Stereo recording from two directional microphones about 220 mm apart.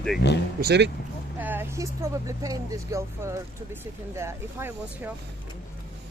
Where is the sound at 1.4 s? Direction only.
10° right (ahead or behind).